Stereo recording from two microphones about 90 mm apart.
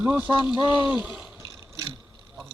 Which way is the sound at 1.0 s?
10° right (ahead or behind).